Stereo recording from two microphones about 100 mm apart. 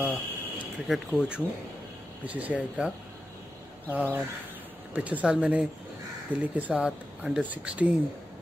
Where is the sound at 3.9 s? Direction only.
15° right (ahead or behind).